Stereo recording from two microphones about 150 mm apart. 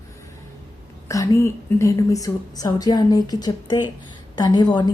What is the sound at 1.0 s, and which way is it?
A woman's voice, 20° left (ahead or behind).